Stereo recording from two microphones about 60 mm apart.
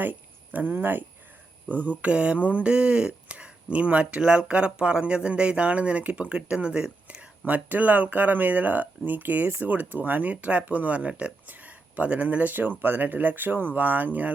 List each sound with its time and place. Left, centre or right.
0.0 s speech: right